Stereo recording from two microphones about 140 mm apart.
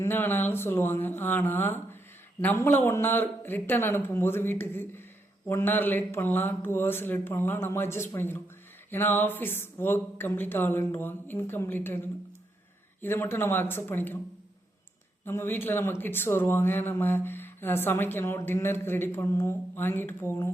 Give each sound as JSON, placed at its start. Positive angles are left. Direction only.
{"t": 0.0, "sound": "speech", "side_deg": 15}
{"t": 15.2, "sound": "speech", "side_deg": 15}